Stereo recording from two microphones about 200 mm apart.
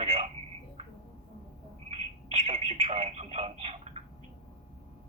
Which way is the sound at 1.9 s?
35° right (ahead or behind).